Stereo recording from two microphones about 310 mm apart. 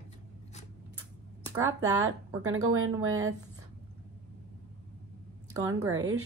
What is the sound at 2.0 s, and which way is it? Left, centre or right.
Speech, right.